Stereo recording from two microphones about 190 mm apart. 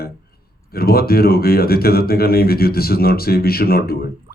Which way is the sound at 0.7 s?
55° left (ahead or behind).